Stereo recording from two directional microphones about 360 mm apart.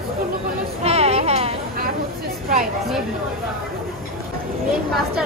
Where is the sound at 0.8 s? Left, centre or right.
Centre.